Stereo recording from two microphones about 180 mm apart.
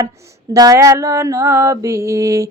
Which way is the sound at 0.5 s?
20° right (ahead or behind).